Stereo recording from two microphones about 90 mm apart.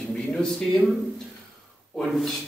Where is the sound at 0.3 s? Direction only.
10° left (ahead or behind).